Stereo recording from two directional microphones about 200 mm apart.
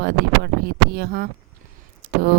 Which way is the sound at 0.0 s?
55° right (ahead or behind).